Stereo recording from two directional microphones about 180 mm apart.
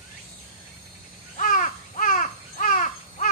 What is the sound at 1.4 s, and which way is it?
Caw, 45° left (ahead or behind).